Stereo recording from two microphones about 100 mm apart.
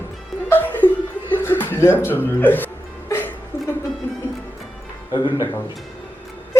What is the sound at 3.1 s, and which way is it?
Music, 25° left (ahead or behind).